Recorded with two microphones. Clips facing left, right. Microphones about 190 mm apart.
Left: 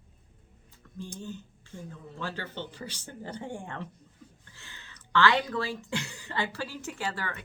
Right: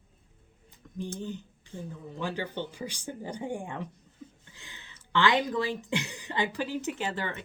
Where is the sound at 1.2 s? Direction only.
15° right (ahead or behind).